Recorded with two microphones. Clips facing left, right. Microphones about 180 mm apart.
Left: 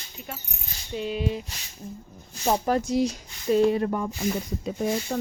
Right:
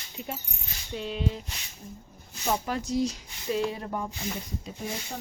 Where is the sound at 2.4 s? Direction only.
40° left (ahead or behind).